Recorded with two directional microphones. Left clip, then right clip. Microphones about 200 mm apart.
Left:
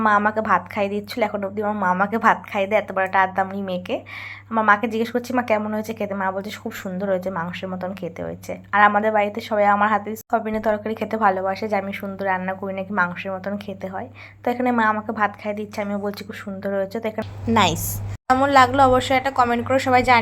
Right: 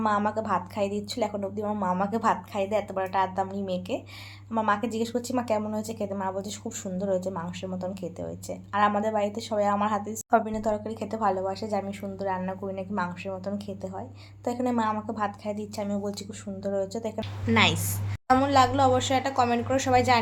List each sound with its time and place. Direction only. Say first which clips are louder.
0.0 s a woman's voice: left 8 dB; 15° left (ahead or behind)